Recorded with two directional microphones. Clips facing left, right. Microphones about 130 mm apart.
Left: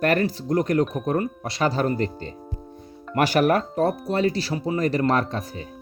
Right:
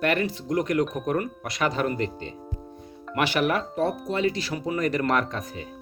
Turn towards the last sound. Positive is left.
turn(degrees=35)  # may be behind; listen again after turning